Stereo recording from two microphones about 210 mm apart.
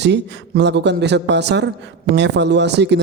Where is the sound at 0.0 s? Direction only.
55° right (ahead or behind).